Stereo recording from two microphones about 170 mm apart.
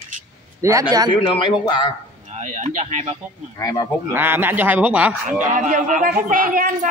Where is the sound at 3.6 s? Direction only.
20° left (ahead or behind).